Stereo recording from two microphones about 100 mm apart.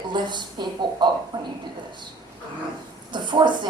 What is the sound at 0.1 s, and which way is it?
A woman's voice, 50° right (ahead or behind).